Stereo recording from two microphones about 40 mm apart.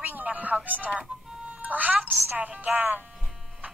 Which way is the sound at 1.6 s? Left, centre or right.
Right.